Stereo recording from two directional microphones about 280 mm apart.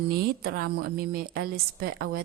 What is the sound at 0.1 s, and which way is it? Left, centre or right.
A woman's voice, right.